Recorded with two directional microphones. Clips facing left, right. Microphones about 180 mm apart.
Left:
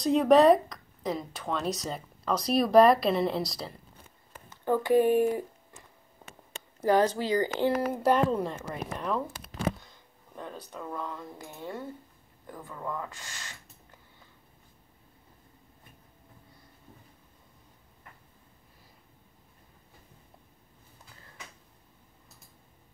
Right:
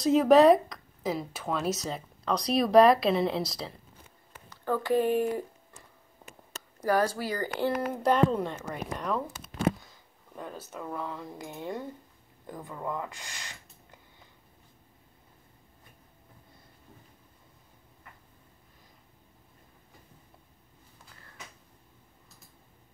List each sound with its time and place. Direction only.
0.0 s speech: centre (ahead or behind)
4.5 s speech: 15° left (ahead or behind)
6.8 s speech: 20° left (ahead or behind)
7.9 s speech: 5° left (ahead or behind); by 13.6 s 15° right (ahead or behind)